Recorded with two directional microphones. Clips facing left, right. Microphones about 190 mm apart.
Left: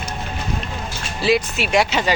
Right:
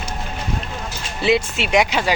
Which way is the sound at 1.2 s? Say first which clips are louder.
Even; 25° right (ahead or behind).